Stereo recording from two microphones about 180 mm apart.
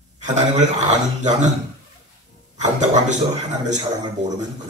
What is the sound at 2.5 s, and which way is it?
Speech, 40° right (ahead or behind).